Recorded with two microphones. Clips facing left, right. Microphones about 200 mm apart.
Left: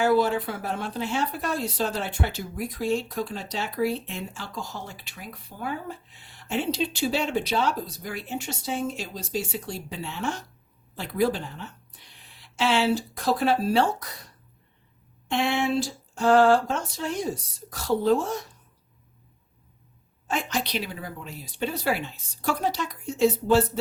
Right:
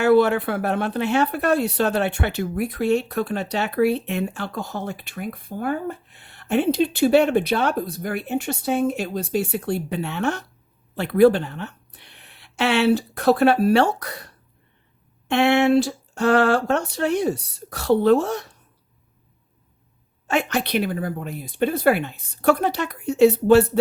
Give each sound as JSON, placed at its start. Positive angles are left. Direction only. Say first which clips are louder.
{"t": 0.0, "sound": "speech", "louder": "right 6 dB", "side_deg": -65}
{"t": 20.2, "sound": "speech", "louder": "right 6 dB", "side_deg": -70}